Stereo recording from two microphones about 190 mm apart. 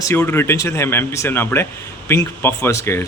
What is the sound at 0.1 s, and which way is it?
Speech, 10° left (ahead or behind).